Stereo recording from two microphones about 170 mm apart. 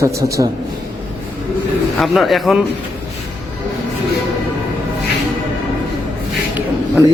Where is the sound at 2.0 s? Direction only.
Centre (ahead or behind).